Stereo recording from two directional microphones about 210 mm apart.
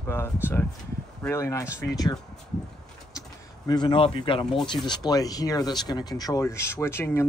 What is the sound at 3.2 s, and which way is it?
Speech, 20° left (ahead or behind).